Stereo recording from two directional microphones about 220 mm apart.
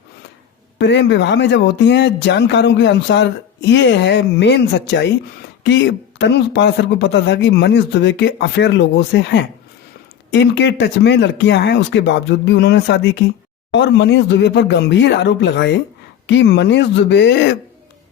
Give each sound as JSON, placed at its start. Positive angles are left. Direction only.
{"t": 0.8, "sound": "a man's voice", "side_deg": 50}